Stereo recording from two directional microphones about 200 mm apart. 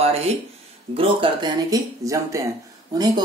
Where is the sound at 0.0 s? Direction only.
30° right (ahead or behind).